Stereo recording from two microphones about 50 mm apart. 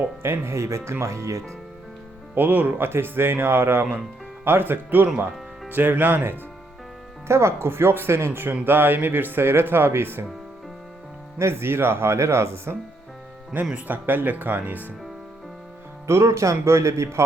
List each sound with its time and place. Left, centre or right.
0.2 s speech: right
2.3 s speech: right
7.3 s speech: right
11.3 s speech: right
13.7 s speech: right
16.0 s speech: right